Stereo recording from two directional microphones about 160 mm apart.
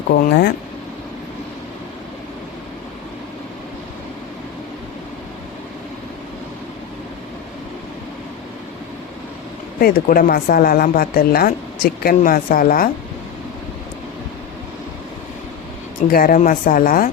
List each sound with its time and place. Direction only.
0.1 s speech: 90° left
9.8 s speech: 65° left (ahead or behind)
16.1 s speech: 60° left (ahead or behind)